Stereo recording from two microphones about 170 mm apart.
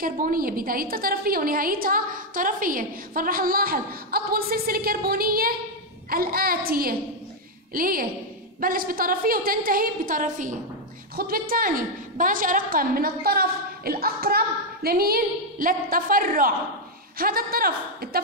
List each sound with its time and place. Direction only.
0.0 s a woman's voice: 55° right (ahead or behind)